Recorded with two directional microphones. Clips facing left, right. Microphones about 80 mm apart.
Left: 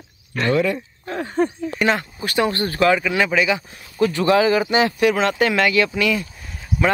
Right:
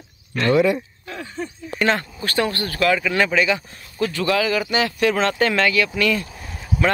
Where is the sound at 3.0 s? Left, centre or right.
Centre.